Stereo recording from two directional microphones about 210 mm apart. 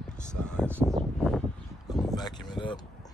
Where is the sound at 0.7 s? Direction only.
5° left (ahead or behind).